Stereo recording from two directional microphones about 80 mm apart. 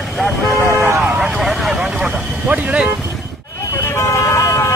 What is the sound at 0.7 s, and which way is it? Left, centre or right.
Speech, right.